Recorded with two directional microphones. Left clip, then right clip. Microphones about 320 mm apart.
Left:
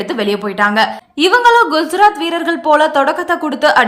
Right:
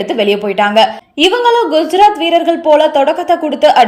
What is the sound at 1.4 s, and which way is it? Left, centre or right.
Speech, left.